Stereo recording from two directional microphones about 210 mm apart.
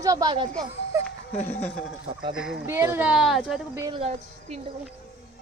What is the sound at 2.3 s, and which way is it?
Speech, 5° right (ahead or behind).